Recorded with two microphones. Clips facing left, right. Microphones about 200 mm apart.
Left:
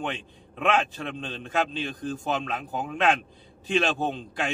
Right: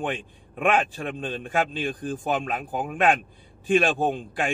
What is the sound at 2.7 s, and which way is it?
Speech, 15° right (ahead or behind).